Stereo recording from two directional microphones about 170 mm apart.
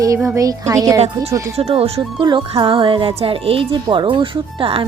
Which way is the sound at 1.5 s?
35° right (ahead or behind).